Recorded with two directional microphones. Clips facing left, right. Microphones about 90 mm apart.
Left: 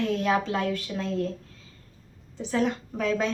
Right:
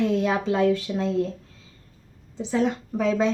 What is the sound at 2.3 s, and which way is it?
Speech, 20° right (ahead or behind).